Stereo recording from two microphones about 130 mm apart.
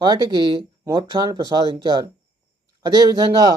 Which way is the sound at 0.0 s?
35° right (ahead or behind).